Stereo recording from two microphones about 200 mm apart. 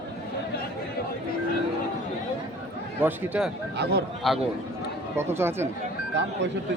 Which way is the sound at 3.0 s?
10° right (ahead or behind).